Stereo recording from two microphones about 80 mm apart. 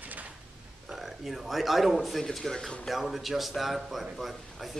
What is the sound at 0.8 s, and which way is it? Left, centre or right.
Speech, centre.